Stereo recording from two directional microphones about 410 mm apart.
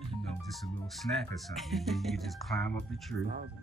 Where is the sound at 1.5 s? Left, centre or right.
Centre.